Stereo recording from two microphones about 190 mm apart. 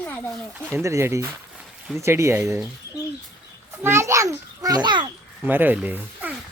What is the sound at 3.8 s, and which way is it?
A child's voice, 15° right (ahead or behind).